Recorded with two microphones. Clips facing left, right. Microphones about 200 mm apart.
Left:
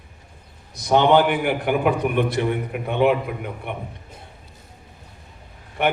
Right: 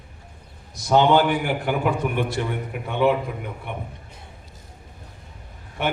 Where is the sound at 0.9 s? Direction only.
60° left (ahead or behind).